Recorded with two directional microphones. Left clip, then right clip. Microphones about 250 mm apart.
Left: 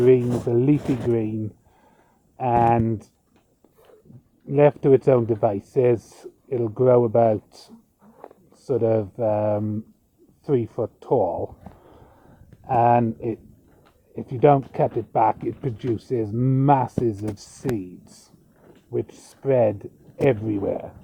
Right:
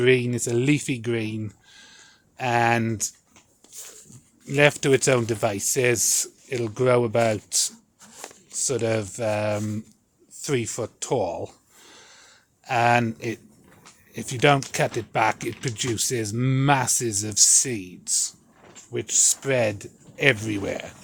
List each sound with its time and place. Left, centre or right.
0.0 s speech: centre
2.4 s speech: centre
4.4 s speech: centre
8.0 s a sound: right
8.6 s speech: centre
12.6 s speech: centre
18.9 s speech: centre